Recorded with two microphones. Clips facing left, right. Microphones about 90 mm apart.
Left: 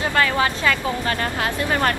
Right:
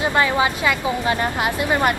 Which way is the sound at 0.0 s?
20° right (ahead or behind).